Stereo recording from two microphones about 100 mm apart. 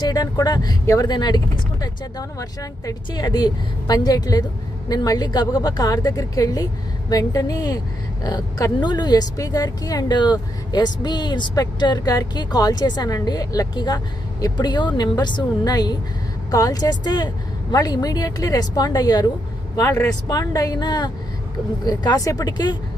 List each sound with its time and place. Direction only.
0.0 s a woman's voice: 40° left (ahead or behind)
19.7 s a man's voice: 25° left (ahead or behind)
20.2 s a woman's voice: 40° left (ahead or behind)